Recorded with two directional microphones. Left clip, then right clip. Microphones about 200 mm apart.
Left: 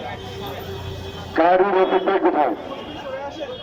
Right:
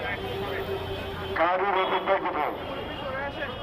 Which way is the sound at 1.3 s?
50° left (ahead or behind).